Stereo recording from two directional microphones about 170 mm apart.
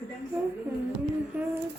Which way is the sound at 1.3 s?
10° right (ahead or behind).